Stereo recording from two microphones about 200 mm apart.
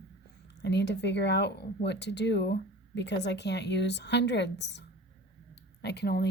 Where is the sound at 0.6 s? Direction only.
60° left (ahead or behind).